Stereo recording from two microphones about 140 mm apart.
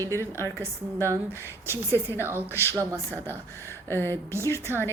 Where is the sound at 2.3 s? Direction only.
15° right (ahead or behind).